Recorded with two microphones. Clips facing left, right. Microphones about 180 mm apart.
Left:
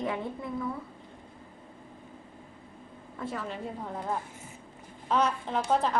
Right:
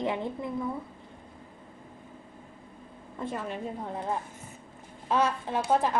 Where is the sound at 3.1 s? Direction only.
15° right (ahead or behind).